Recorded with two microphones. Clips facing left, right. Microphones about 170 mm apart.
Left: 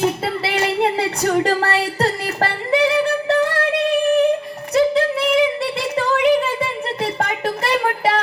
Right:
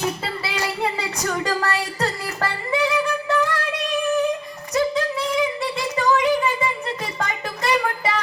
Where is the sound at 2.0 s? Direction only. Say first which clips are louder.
Left 4 dB; 60° left (ahead or behind).